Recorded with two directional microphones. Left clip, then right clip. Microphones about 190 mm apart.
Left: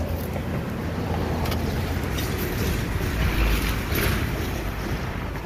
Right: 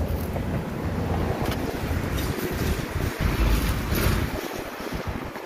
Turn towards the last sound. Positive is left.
turn(degrees=-65)  # may be behind; listen again after turning